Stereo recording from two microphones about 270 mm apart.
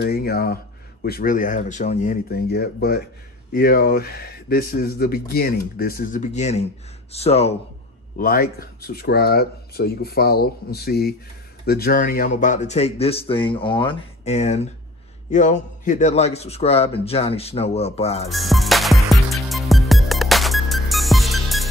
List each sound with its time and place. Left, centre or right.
0.0 s speech: left
8.2 s a man's voice: left
18.3 s music: centre